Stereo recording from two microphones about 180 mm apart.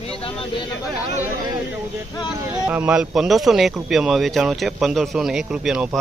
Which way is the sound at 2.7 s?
10° right (ahead or behind).